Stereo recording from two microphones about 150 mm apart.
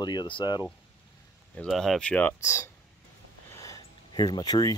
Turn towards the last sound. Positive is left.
turn(degrees=25)  # may be behind; listen again after turning